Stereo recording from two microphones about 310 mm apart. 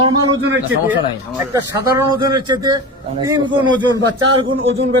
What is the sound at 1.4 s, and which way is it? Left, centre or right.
A man's voice, centre.